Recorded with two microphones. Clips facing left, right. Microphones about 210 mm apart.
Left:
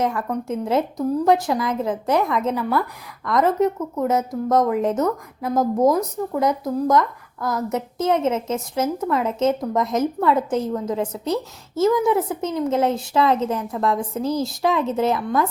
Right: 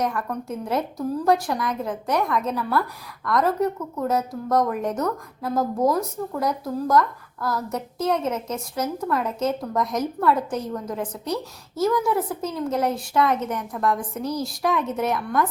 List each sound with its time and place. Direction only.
0.0 s a woman's voice: 20° left (ahead or behind)